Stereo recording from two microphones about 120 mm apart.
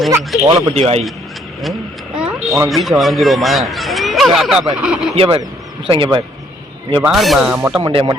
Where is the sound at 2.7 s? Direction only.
Centre (ahead or behind).